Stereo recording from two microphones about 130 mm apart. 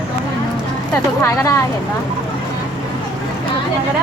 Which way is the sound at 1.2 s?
20° left (ahead or behind).